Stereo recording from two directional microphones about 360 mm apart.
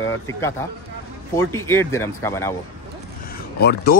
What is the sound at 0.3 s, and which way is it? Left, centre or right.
Speech, centre.